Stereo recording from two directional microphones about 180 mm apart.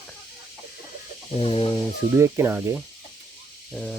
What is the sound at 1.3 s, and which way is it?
Chicken, 30° left (ahead or behind).